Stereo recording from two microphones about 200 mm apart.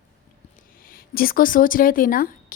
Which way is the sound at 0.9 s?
45° left (ahead or behind).